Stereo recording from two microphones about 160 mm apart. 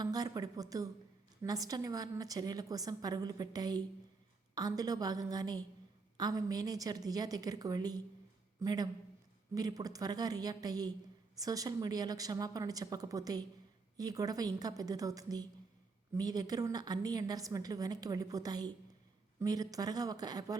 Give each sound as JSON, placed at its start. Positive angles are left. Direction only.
{"t": 0.0, "sound": "a woman's voice", "side_deg": -25}